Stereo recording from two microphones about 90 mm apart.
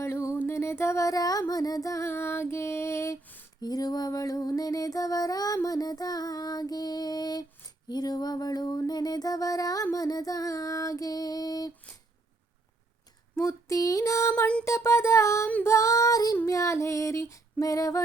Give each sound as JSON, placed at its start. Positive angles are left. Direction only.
{"t": 0.0, "sound": "music", "side_deg": 35}
{"t": 0.4, "sound": "a sound", "side_deg": 30}
{"t": 3.6, "sound": "music", "side_deg": 45}
{"t": 5.6, "sound": "child singing", "side_deg": 45}
{"t": 7.9, "sound": "music", "side_deg": 50}
{"t": 9.9, "sound": "female singing", "side_deg": 45}
{"t": 13.3, "sound": "female singing", "side_deg": 35}